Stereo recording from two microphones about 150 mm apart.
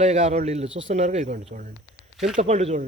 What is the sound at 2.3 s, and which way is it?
Speech, 50° right (ahead or behind).